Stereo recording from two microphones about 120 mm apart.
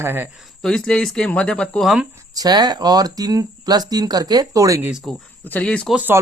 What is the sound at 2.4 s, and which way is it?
Speech, 35° right (ahead or behind).